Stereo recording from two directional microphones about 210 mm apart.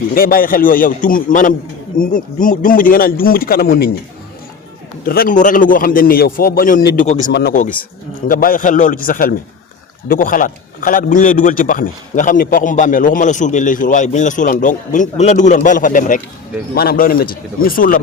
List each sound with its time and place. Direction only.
0.1 s a man's voice: 45° left (ahead or behind)
5.0 s a man's voice: 45° left (ahead or behind)